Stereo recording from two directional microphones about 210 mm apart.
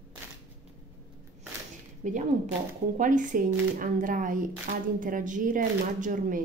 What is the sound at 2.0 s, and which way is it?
Speech, 35° right (ahead or behind).